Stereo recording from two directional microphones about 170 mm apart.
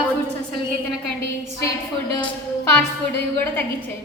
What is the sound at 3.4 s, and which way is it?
Speech, 10° left (ahead or behind).